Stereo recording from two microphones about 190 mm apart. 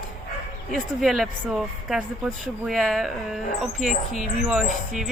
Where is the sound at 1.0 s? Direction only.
Centre (ahead or behind).